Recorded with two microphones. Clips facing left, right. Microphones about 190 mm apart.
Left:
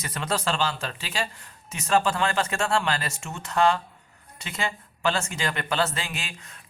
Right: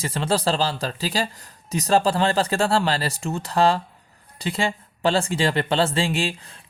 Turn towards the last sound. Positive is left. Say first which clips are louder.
# right 13 dB
turn(degrees=-30)  # may be behind; listen again after turning